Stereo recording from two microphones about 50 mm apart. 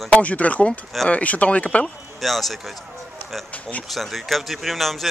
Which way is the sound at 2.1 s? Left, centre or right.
Centre.